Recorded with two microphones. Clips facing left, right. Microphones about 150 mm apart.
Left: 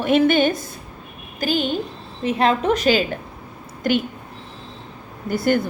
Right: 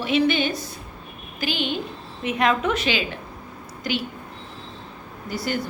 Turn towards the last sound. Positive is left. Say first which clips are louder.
# left 8 dB
turn(degrees=50)  # may be behind; listen again after turning